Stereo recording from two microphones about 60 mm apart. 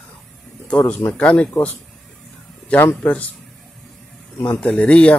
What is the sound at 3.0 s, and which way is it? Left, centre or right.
Speech, left.